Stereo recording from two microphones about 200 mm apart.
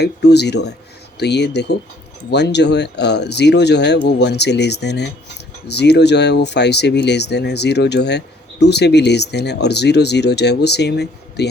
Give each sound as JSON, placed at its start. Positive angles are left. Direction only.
{"t": 0.0, "sound": "speech", "side_deg": 55}